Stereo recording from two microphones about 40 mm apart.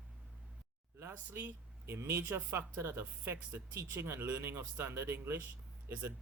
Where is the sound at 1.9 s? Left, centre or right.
Right.